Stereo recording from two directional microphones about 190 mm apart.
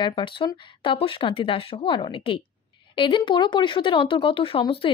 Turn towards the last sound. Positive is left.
turn(degrees=30)  # may be behind; listen again after turning